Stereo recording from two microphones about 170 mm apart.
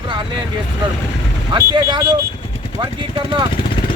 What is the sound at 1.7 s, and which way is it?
Speech, 25° right (ahead or behind).